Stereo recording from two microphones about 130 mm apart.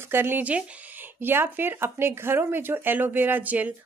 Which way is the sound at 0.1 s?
15° right (ahead or behind).